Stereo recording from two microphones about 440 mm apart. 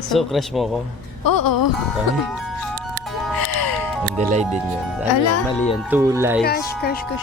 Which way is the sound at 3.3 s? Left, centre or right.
Left.